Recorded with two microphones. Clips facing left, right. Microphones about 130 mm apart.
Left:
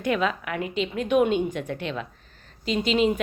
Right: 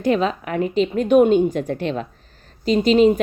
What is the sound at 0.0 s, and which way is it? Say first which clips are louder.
Speech: right 5 dB; 30° right (ahead or behind).